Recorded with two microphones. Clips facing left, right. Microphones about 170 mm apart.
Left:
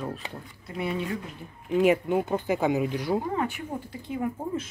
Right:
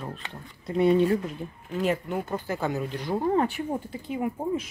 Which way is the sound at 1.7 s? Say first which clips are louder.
Left 5 dB; 15° left (ahead or behind).